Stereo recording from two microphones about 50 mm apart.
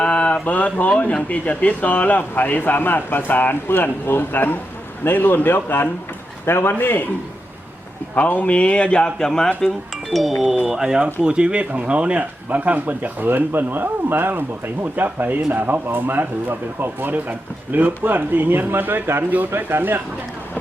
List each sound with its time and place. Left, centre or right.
0.0 s a sound: left
0.4 s a man's voice: left
8.1 s speech: left
9.0 s speech: centre
9.6 s speech: centre
10.7 s speech: centre; by 20.0 s right